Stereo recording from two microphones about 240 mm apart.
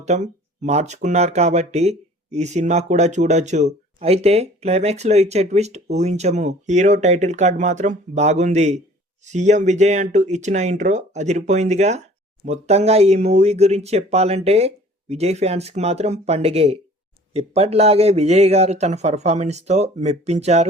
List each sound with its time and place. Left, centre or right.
0.0 s speech: right